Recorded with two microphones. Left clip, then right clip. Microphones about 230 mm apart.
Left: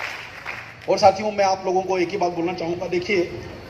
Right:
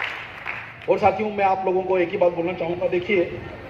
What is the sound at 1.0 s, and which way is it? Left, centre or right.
A man's voice, left.